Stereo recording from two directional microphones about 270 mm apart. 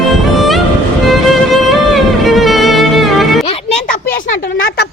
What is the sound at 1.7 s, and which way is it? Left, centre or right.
Music, centre.